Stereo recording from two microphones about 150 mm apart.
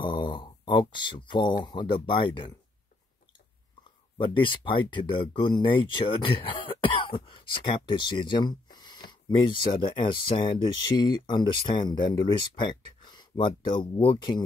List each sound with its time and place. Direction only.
0.0 s mantra: 35° left (ahead or behind)
1.6 s speech: 30° left (ahead or behind)
4.2 s speech: 35° left (ahead or behind)